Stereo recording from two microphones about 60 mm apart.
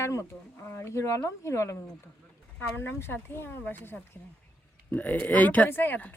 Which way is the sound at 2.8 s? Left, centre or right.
Left.